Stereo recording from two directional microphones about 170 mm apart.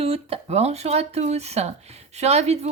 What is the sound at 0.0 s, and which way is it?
Speech, 35° right (ahead or behind).